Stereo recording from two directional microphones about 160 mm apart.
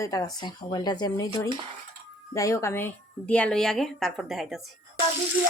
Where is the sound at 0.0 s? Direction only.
25° left (ahead or behind); by 4.6 s centre (ahead or behind).